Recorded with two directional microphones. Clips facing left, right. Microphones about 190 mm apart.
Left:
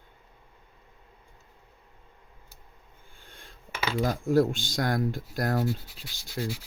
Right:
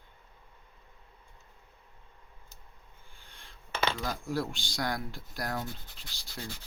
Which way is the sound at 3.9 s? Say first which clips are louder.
Left 10 dB; 50° left (ahead or behind).